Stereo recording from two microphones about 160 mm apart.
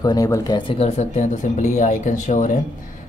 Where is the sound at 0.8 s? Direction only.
45° left (ahead or behind).